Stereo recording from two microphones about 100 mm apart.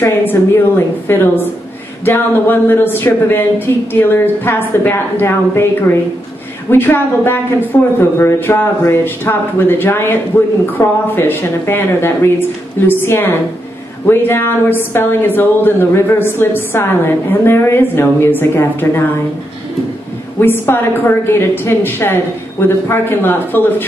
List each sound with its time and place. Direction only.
0.0 s speech: 20° left (ahead or behind)
20.3 s speech: 20° left (ahead or behind)